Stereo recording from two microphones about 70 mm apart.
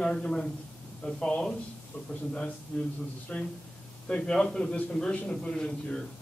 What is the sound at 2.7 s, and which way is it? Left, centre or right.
A man's voice, centre.